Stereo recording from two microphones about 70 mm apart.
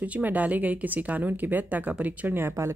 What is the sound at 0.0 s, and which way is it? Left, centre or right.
Speech, right.